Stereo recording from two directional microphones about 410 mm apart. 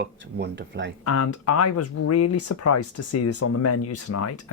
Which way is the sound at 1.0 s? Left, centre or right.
Left.